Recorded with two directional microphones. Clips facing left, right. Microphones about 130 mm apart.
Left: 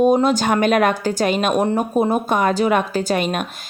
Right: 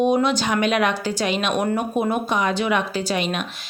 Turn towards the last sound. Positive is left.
turn(degrees=45)  # may be behind; listen again after turning